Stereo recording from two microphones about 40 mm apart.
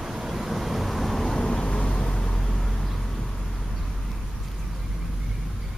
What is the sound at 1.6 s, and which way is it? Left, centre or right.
Vehicle, left.